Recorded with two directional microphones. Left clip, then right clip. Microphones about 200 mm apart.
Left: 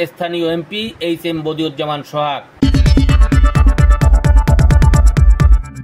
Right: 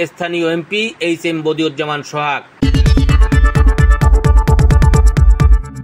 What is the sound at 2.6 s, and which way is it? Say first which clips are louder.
Music: left 1 dB; centre (ahead or behind).